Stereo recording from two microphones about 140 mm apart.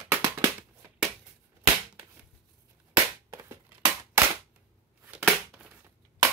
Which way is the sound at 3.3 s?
20° right (ahead or behind).